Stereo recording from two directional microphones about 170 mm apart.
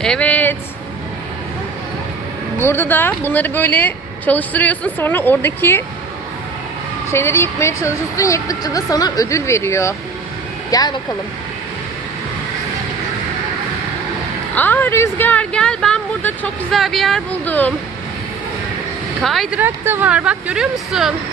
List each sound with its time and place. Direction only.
0.0 s speech: 5° left (ahead or behind)
2.6 s speech: 15° left (ahead or behind)
7.1 s speech: 15° left (ahead or behind)
14.5 s speech: 10° left (ahead or behind)
19.2 s speech: centre (ahead or behind)
19.5 s speech: 10° right (ahead or behind)